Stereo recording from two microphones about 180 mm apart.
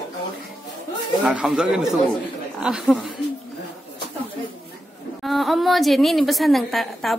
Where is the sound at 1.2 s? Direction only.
5° right (ahead or behind).